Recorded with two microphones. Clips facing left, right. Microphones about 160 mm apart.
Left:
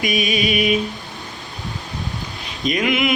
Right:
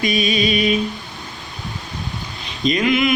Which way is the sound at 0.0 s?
15° left (ahead or behind).